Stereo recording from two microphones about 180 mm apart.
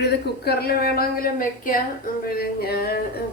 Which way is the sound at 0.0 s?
60° left (ahead or behind).